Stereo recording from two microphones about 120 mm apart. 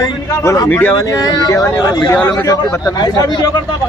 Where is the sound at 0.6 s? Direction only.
15° left (ahead or behind).